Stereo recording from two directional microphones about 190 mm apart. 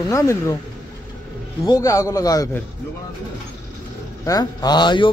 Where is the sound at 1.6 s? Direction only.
15° left (ahead or behind).